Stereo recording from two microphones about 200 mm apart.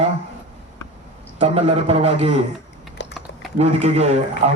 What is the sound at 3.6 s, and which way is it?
Speech, 35° right (ahead or behind).